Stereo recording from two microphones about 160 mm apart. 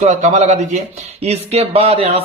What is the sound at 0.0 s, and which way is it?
Speech, 45° right (ahead or behind).